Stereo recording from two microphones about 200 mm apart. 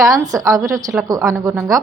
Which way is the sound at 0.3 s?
15° right (ahead or behind).